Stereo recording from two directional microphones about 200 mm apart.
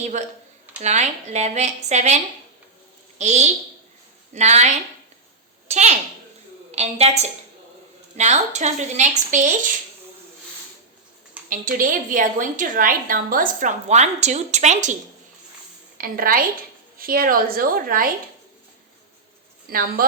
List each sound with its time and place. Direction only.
0.0 s a woman's voice: 35° right (ahead or behind)
11.4 s a woman's voice: 45° right (ahead or behind)
16.0 s a woman's voice: 45° right (ahead or behind)
20.0 s a woman's voice: 45° right (ahead or behind)